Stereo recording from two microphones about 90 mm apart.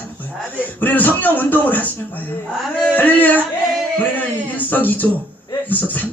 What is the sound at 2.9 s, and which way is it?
Speech, 20° left (ahead or behind).